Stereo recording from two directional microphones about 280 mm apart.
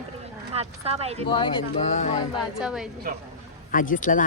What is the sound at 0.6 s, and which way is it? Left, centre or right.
Speech, right.